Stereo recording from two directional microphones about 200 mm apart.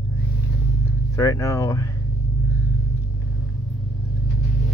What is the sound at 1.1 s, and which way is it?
Speech, 15° left (ahead or behind).